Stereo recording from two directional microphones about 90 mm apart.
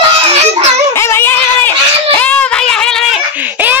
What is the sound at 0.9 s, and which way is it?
Music, 30° left (ahead or behind).